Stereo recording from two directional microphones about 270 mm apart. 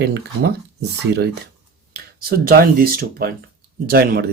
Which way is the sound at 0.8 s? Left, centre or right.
Right.